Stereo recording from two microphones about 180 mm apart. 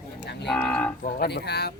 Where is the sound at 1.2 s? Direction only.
65° left (ahead or behind).